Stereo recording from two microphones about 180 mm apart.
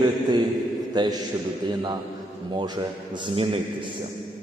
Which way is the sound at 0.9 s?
20° right (ahead or behind).